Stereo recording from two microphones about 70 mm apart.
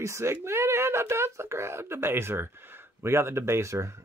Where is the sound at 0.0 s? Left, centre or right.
Right.